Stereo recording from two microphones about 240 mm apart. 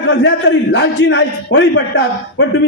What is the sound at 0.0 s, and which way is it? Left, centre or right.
A man's voice, left.